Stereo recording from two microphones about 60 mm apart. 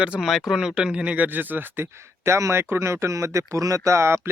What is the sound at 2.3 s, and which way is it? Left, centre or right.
Speech, right.